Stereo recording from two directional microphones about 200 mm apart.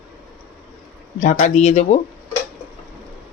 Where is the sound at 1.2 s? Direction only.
40° left (ahead or behind).